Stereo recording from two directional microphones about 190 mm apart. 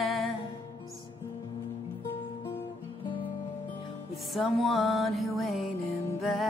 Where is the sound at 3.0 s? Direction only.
25° left (ahead or behind).